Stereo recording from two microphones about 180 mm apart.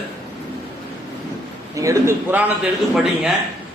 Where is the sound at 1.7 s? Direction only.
15° right (ahead or behind).